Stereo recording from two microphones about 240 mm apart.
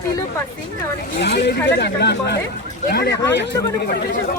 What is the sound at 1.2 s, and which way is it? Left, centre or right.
Speech, left.